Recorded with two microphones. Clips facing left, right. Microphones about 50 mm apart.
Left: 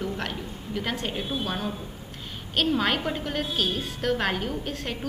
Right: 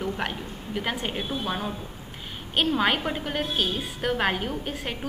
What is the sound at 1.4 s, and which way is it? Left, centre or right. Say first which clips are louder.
A woman's voice: even; centre.